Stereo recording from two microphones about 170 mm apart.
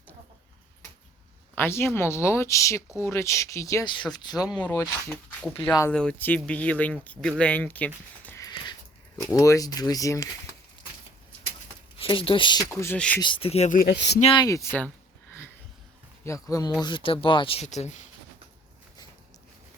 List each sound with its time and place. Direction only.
1.5 s speech: 15° left (ahead or behind)
4.5 s speech: 10° left (ahead or behind)
11.9 s speech: 30° left (ahead or behind); by 13.0 s 15° left (ahead or behind)
13.2 s speech: 30° left (ahead or behind)
13.7 s speech: 80° left
14.3 s speech: 20° left (ahead or behind)
16.2 s speech: 20° left (ahead or behind)
16.8 s speech: 30° left (ahead or behind)